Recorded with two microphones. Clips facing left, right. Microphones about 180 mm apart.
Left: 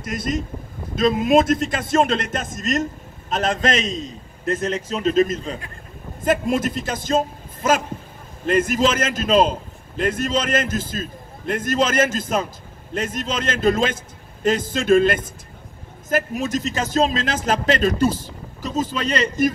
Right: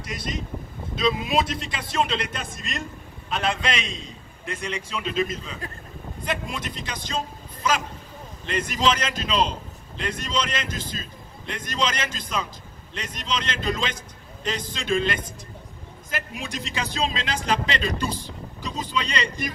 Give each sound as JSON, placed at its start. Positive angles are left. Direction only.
{"t": 0.0, "sound": "a man's voice", "side_deg": 50}
{"t": 6.8, "sound": "a man's voice", "side_deg": 45}